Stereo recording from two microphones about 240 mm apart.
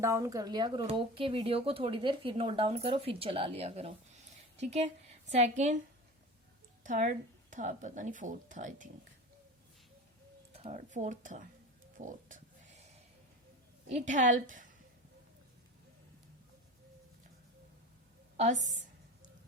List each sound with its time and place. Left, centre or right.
0.0 s speech: centre; by 5.7 s right
6.8 s a woman's voice: right
10.5 s a sound: right
10.9 s a woman's voice: right
11.9 s a sound: right
13.9 s a woman's voice: right
18.3 s speech: right